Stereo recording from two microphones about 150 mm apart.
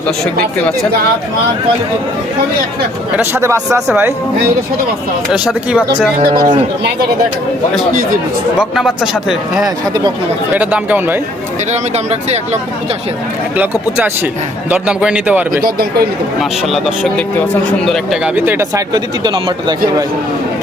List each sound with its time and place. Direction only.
3.2 s a man's voice: 15° right (ahead or behind)
5.3 s speech: centre (ahead or behind)
6.3 s a man's voice: 30° right (ahead or behind)
8.5 s speech: 5° right (ahead or behind)
10.5 s a man's voice: 10° right (ahead or behind)
13.6 s a man's voice: 10° right (ahead or behind)
15.6 s speech: 90° right
16.4 s speech: centre (ahead or behind)
18.3 s a man's voice: 15° right (ahead or behind)
18.9 s a man's voice: 30° right (ahead or behind)